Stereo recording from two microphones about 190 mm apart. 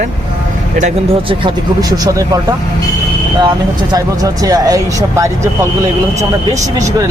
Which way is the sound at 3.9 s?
20° right (ahead or behind).